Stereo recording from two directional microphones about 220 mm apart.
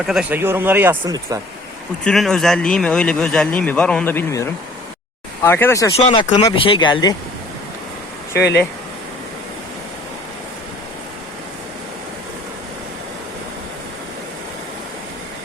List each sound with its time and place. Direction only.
0.0 s speech: centre (ahead or behind)
2.0 s speech: centre (ahead or behind)
6.0 s speech: 25° left (ahead or behind)